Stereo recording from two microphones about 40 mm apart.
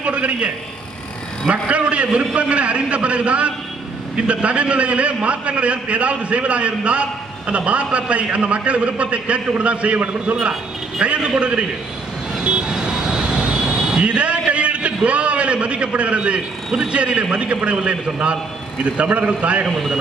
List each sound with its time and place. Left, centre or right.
0.0 s a man's voice: right
1.5 s a man's voice: right
12.4 s vehicle: right
13.9 s a sound: right
15.0 s a man's voice: right